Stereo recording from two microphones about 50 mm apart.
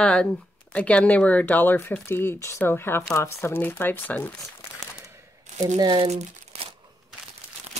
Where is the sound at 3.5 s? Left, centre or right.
Left.